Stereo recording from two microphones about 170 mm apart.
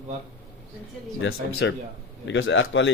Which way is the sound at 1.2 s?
90° left.